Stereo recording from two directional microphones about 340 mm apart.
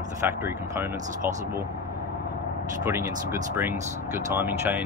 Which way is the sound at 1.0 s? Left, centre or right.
Right.